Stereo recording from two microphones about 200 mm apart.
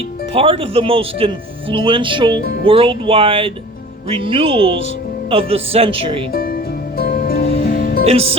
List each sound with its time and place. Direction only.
0.3 s speech: 25° right (ahead or behind)
2.4 s speech: 45° left (ahead or behind)
2.6 s speech: 25° right (ahead or behind)
6.3 s music: 50° left (ahead or behind)
7.4 s music: 35° left (ahead or behind)
7.8 s music: 50° left (ahead or behind)
8.0 s music: 30° right (ahead or behind)